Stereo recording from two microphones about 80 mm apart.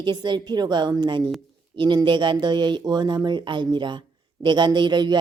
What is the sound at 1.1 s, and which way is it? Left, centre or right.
A woman's voice, right.